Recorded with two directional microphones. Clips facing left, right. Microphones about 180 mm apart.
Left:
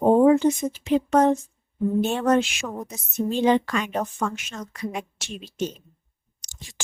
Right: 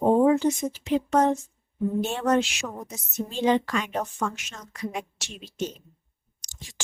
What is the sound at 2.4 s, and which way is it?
A woman's voice, 55° left (ahead or behind).